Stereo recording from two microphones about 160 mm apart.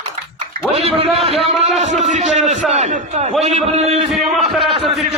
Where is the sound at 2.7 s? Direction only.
45° right (ahead or behind).